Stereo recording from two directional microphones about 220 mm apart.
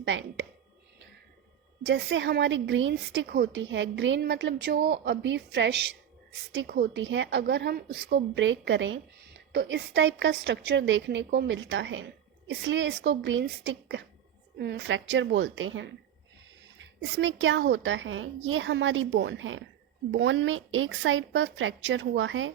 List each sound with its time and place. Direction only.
0.0 s a woman's voice: 55° right (ahead or behind)
1.8 s a woman's voice: 55° right (ahead or behind)